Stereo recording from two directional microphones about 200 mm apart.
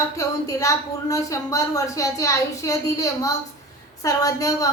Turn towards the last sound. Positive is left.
turn(degrees=15)  # may be behind; listen again after turning